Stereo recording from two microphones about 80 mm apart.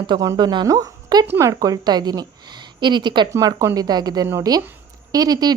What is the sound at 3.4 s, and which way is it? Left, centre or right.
A woman's voice, right.